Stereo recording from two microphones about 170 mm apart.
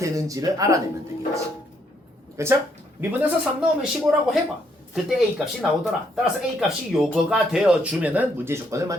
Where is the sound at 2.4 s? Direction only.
15° right (ahead or behind).